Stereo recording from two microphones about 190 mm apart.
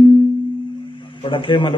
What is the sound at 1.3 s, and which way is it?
Speech, 25° left (ahead or behind).